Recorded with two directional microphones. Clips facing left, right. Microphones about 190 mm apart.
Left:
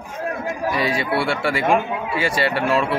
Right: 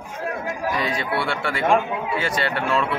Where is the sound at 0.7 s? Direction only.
10° left (ahead or behind).